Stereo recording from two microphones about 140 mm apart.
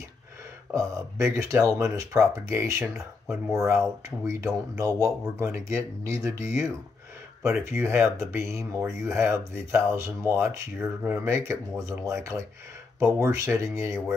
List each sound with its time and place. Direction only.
0.7 s speech: 20° right (ahead or behind)
7.7 s speech: 15° right (ahead or behind)